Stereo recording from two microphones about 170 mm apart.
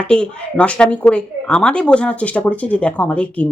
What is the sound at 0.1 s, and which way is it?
Speech, 5° left (ahead or behind).